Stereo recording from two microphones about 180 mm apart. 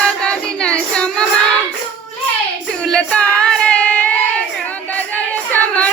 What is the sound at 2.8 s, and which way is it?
Female singing, 5° left (ahead or behind).